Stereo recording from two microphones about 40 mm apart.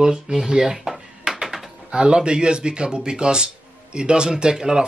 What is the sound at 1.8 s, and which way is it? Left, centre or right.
Speech, right.